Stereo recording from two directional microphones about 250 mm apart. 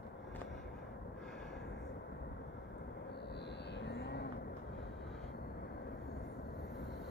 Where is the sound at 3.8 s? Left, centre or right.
Left.